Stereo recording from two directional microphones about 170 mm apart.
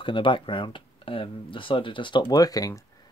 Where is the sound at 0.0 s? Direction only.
30° left (ahead or behind).